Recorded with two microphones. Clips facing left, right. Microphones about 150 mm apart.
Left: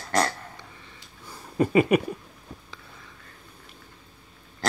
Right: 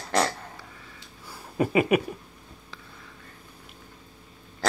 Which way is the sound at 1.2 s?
5° right (ahead or behind).